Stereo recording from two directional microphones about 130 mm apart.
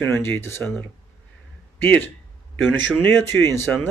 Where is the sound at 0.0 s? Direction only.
15° left (ahead or behind).